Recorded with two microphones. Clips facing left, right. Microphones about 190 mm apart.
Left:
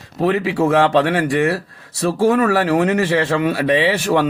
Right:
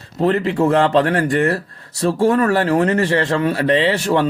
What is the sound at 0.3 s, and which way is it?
Speech, 10° left (ahead or behind).